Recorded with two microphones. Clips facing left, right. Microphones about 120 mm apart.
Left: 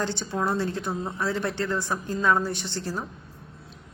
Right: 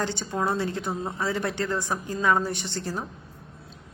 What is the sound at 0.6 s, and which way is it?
Speech, 60° right (ahead or behind).